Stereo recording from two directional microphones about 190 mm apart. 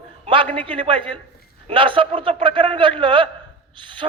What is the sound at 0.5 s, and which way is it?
A man's voice, 30° right (ahead or behind).